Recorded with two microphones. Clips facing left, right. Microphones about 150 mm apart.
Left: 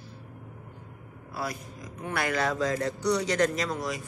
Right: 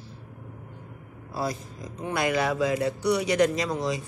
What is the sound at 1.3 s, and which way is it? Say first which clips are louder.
Speech: right 4 dB; 25° right (ahead or behind).